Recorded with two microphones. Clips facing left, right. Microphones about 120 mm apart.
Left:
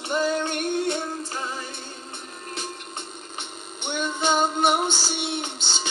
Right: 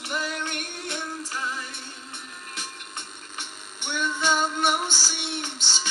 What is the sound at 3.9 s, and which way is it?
Music, 45° left (ahead or behind).